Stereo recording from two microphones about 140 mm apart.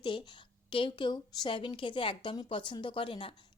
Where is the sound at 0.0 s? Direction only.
35° left (ahead or behind).